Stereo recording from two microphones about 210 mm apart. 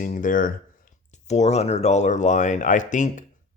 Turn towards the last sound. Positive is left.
turn(degrees=35)  # may be behind; listen again after turning